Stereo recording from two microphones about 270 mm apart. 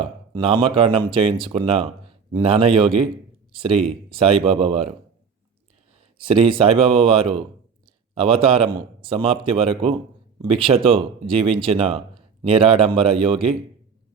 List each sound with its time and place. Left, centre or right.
0.0 s speech: centre
6.1 s speech: centre